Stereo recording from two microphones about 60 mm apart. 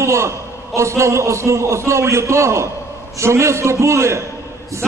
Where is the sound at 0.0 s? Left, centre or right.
Right.